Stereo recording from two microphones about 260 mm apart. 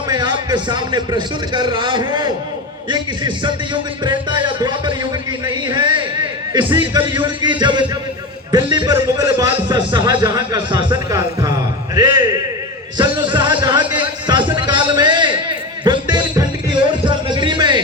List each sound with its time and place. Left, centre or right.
0.1 s a man's voice: centre
13.0 s music: centre
17.1 s a sound: centre